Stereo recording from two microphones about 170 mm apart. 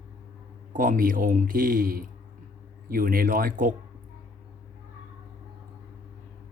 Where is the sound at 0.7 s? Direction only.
55° right (ahead or behind).